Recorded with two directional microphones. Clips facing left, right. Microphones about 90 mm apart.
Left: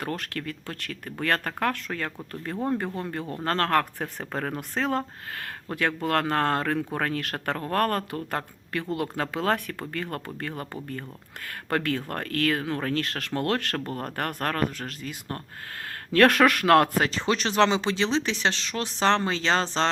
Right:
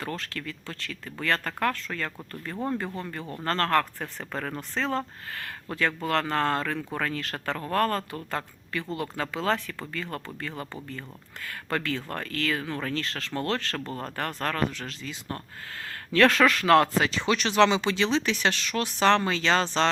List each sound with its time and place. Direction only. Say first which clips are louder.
0.0 s speech: left 2 dB; 60° left (ahead or behind)
2.5 s speech: left 3 dB; 65° left (ahead or behind)
3.0 s speech: left 3 dB; 55° left (ahead or behind)
4.3 s speech: left 2 dB; 40° left (ahead or behind)
4.7 s speech: left 1 dB; 55° left (ahead or behind); by 19.9 s 35° left (ahead or behind)